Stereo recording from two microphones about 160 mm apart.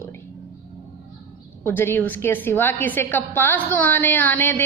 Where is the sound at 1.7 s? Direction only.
15° left (ahead or behind).